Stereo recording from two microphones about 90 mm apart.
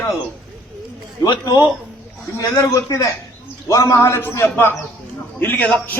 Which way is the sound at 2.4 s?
35° left (ahead or behind).